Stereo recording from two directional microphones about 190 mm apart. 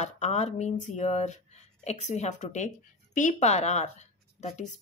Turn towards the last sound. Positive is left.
turn(degrees=40)  # may be behind; listen again after turning